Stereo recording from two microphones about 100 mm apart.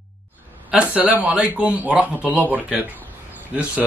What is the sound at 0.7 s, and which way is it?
A man's voice, 15° right (ahead or behind).